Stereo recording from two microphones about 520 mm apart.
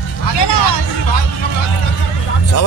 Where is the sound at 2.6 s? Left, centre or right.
Left.